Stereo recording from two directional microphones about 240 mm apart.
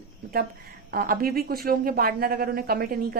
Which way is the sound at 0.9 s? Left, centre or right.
Right.